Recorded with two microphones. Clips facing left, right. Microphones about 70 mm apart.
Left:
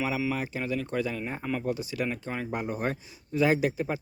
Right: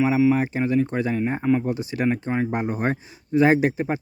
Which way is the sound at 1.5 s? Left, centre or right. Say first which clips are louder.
Right 9 dB; right.